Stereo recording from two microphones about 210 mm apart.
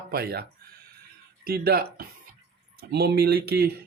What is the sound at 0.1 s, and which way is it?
Speech, 50° right (ahead or behind).